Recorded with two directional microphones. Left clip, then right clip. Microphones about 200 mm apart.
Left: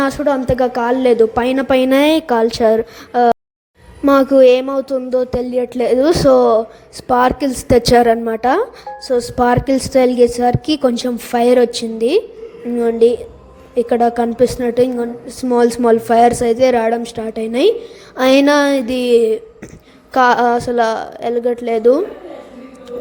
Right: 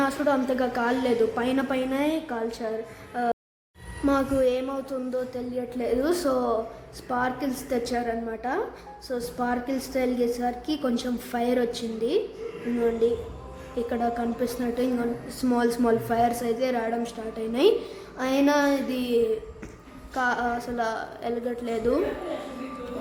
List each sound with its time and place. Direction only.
0.0 s a woman's voice: 35° left (ahead or behind)